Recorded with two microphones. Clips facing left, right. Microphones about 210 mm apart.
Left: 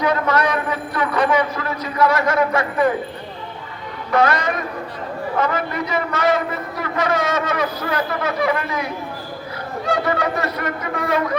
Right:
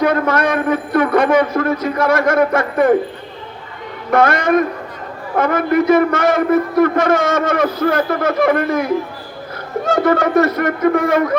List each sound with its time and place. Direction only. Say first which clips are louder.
0.0 s a man's voice: right 4 dB; 50° right (ahead or behind)
4.1 s a man's voice: right 5 dB; 50° right (ahead or behind)